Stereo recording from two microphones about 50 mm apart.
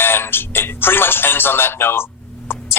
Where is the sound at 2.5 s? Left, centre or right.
Left.